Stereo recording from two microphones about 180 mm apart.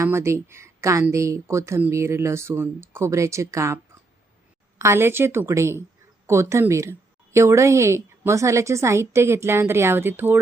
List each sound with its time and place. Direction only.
0.0 s a woman's voice: 15° right (ahead or behind)
4.8 s a woman's voice: 15° right (ahead or behind)